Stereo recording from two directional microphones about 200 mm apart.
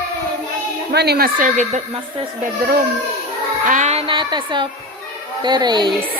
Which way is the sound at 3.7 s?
35° right (ahead or behind).